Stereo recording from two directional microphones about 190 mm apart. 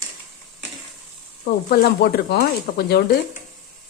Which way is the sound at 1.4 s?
55° left (ahead or behind).